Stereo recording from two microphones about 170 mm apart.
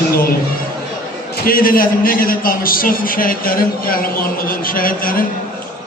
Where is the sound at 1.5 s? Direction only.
55° left (ahead or behind).